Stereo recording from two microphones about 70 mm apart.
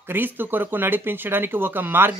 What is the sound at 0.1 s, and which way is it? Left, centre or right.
Speech, right.